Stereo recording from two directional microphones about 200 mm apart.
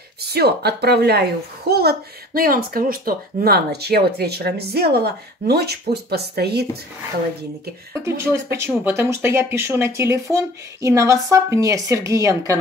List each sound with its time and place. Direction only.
0.3 s a child's voice: 55° right (ahead or behind)
8.0 s speech: 15° right (ahead or behind)